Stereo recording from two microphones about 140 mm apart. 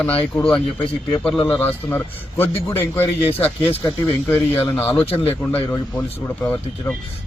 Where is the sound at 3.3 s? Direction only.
45° left (ahead or behind).